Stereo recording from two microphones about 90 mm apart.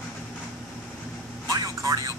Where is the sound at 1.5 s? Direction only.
40° right (ahead or behind).